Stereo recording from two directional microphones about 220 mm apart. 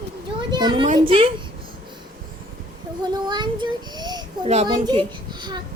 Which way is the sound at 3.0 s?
20° right (ahead or behind).